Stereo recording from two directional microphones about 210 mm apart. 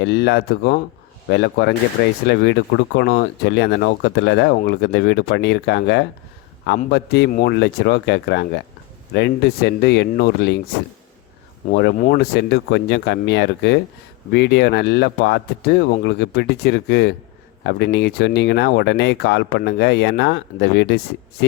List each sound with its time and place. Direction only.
0.0 s speech: 55° left (ahead or behind)